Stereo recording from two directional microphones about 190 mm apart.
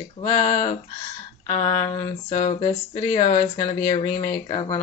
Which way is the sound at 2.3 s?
30° left (ahead or behind).